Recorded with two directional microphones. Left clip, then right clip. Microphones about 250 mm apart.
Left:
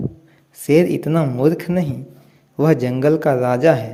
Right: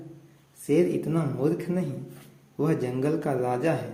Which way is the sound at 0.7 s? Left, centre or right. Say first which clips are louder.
Left 9 dB; left.